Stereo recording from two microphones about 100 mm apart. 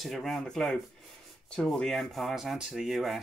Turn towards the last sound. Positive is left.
turn(degrees=0)  # may be behind; listen again after turning